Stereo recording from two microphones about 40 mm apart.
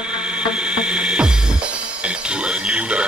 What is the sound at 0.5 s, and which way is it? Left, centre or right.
Music, right.